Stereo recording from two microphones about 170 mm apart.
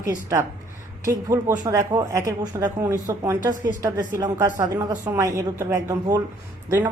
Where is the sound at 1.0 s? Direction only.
15° right (ahead or behind).